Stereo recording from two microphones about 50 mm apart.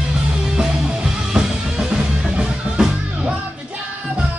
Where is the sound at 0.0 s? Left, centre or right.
Centre.